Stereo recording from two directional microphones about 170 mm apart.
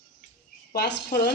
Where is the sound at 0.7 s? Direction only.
65° left (ahead or behind).